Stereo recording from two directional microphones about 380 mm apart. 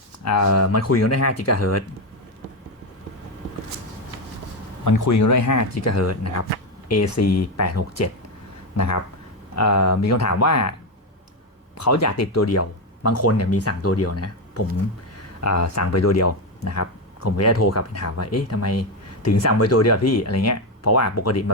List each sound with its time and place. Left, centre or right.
0.3 s speech: left
4.9 s speech: left
11.8 s speech: left